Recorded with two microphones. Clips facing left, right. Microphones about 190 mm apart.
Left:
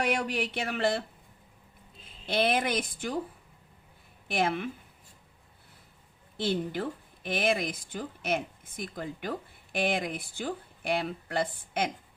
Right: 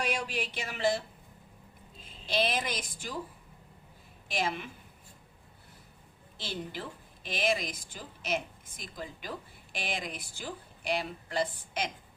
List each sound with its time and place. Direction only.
0.0 s a woman's voice: 60° left (ahead or behind)
2.2 s a woman's voice: 55° left (ahead or behind)
4.3 s a woman's voice: 60° left (ahead or behind)
6.3 s a woman's voice: 55° left (ahead or behind)